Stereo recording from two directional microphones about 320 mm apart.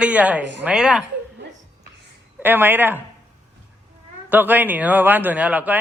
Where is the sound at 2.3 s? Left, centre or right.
Centre.